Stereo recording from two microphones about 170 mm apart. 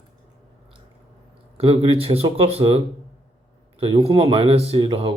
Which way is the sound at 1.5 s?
35° right (ahead or behind).